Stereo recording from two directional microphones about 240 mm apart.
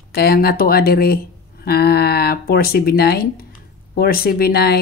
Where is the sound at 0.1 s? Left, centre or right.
Left.